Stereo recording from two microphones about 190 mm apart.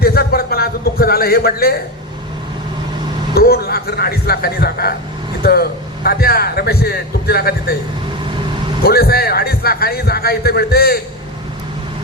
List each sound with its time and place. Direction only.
0.0 s a sound: 55° left (ahead or behind)
3.3 s a man's voice: 55° left (ahead or behind)
8.8 s a man's voice: 55° left (ahead or behind)